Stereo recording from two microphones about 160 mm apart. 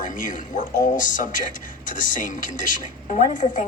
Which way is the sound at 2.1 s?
55° left (ahead or behind).